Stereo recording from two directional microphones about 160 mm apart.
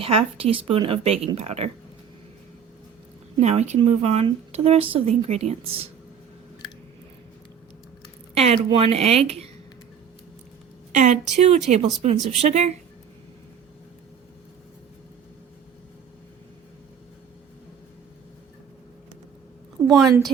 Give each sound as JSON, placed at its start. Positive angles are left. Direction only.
{"t": 0.0, "sound": "speech", "side_deg": -35}
{"t": 3.4, "sound": "speech", "side_deg": -45}
{"t": 8.5, "sound": "speech", "side_deg": -35}
{"t": 10.9, "sound": "a woman's voice", "side_deg": -45}
{"t": 19.8, "sound": "a sound", "side_deg": -20}